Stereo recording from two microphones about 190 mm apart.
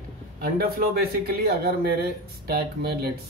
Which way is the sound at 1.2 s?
55° right (ahead or behind).